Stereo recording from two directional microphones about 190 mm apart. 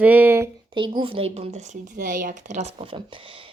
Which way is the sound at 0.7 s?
25° right (ahead or behind).